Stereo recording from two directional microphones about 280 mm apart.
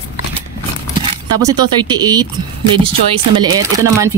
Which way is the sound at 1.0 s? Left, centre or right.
Centre.